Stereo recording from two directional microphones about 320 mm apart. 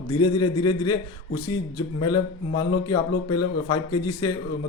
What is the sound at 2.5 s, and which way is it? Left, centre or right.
Speech, centre.